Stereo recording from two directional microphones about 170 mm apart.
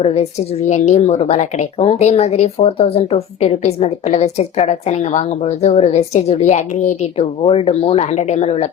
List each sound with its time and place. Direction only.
0.0 s a woman's voice: 40° left (ahead or behind)